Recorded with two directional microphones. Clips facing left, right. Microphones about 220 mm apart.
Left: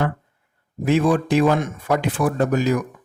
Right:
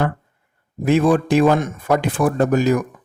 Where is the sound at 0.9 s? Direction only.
50° right (ahead or behind).